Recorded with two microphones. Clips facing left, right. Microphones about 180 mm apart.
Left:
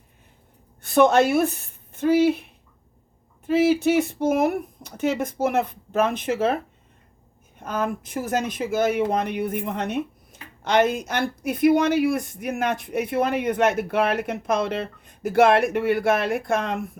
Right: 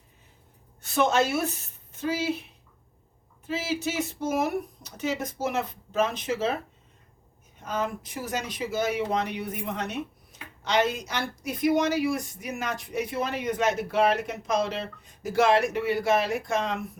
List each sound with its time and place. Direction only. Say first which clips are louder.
0.8 s speech: left 7 dB; 55° left (ahead or behind)
7.6 s speech: left 4 dB; 55° left (ahead or behind)